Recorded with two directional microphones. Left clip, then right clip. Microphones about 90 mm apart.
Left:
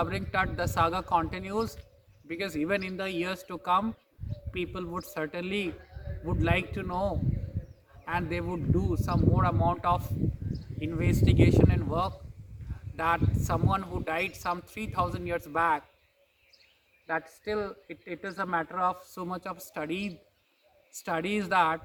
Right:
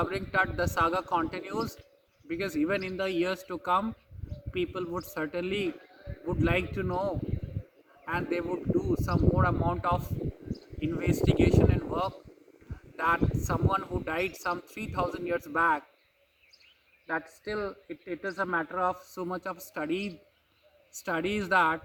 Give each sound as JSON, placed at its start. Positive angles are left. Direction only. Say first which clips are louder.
{"t": 0.2, "sound": "a man's voice", "louder": "right 2 dB", "side_deg": 15}
{"t": 8.0, "sound": "speech", "louder": "right 1 dB", "side_deg": 20}
{"t": 17.7, "sound": "a man's voice", "louder": "right 2 dB", "side_deg": 15}